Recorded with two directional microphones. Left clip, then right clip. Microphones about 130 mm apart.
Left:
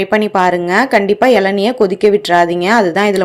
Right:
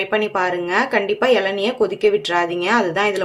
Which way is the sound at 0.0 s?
60° left (ahead or behind).